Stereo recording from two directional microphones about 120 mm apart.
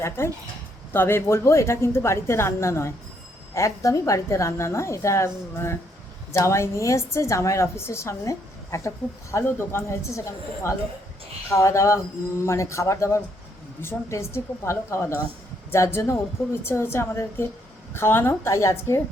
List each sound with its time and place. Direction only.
0.2 s a woman's voice: 20° left (ahead or behind)